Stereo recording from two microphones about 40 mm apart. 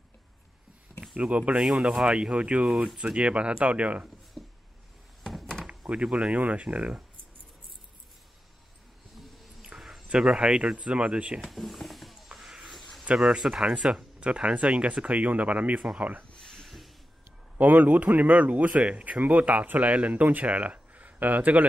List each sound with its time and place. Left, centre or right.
1.1 s speech: right
1.6 s speech: centre
2.1 s speech: right
4.4 s a sound: centre
5.2 s thunk: centre
6.1 s speech: right
9.1 s a sound: centre
10.1 s speech: centre
11.4 s speech: centre
13.1 s speech: centre
14.2 s speech: right
16.3 s a sound: centre
16.6 s a sound: centre
17.6 s speech: right